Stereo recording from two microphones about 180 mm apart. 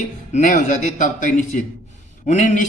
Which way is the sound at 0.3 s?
45° left (ahead or behind).